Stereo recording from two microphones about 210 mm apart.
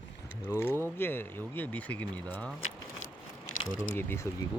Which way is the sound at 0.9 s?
10° left (ahead or behind).